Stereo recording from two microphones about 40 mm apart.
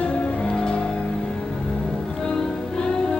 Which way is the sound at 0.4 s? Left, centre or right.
Centre.